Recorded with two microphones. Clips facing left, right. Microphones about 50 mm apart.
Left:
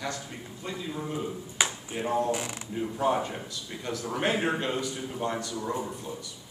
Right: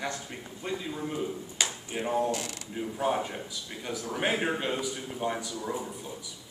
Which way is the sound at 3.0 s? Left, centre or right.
Centre.